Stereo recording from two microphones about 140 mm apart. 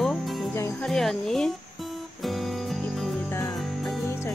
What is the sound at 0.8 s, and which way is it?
Speech, 5° left (ahead or behind).